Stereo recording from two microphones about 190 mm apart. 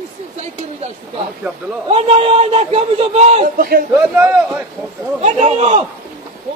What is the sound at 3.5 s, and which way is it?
Speech, 50° right (ahead or behind).